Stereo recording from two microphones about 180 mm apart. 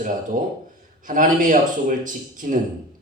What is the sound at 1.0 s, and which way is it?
A man's voice, 45° right (ahead or behind).